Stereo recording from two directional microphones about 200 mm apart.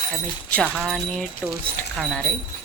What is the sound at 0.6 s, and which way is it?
A woman's voice, centre (ahead or behind).